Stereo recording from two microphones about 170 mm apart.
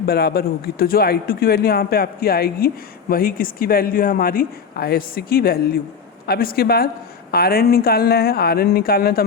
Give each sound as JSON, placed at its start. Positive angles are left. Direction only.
{"t": 0.0, "sound": "speech", "side_deg": 65}